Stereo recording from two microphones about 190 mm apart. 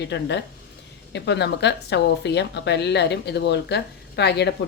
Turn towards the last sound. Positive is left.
turn(degrees=60)  # may be behind; listen again after turning